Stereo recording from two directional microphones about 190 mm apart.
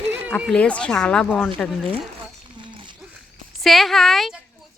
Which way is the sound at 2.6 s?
25° right (ahead or behind).